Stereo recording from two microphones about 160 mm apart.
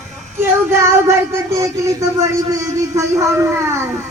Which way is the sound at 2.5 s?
20° right (ahead or behind).